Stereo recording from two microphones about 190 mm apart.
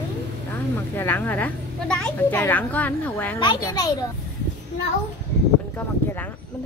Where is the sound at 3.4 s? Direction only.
20° left (ahead or behind).